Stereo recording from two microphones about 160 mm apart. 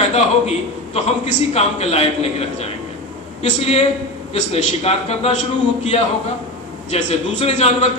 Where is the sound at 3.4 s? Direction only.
40° left (ahead or behind).